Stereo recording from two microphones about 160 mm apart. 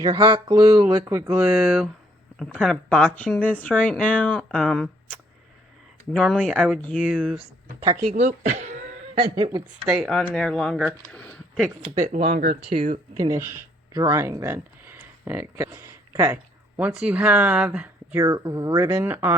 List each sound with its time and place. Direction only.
0.0 s a sound: 25° right (ahead or behind)
1.5 s speech: centre (ahead or behind)
8.1 s speech: 45° right (ahead or behind)
9.1 s a woman's voice: 35° right (ahead or behind)
10.0 s speech: 5° left (ahead or behind)
12.3 s speech: 50° right (ahead or behind)
13.1 s a sound: 20° right (ahead or behind)
13.9 s speech: 20° right (ahead or behind); by 17.9 s 5° right (ahead or behind)
18.1 s a sound: 20° right (ahead or behind)